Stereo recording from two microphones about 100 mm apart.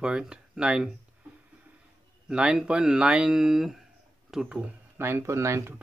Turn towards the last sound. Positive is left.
turn(degrees=-30)  # may be behind; listen again after turning